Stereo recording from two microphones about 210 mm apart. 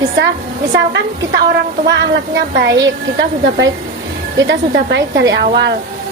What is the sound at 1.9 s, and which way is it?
A woman's voice, 55° right (ahead or behind).